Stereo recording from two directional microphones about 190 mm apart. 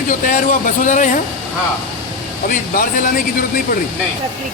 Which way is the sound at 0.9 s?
45° left (ahead or behind).